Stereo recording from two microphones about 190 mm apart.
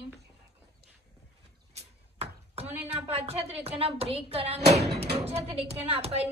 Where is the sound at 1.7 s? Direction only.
30° right (ahead or behind).